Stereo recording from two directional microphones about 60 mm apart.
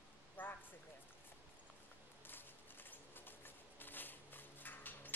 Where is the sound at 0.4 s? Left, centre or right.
Left.